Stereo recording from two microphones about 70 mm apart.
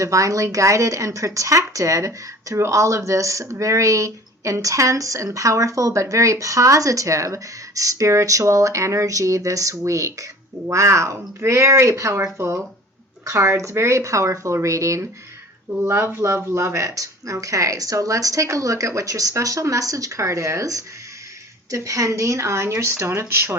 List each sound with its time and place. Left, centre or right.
0.0 s speech: right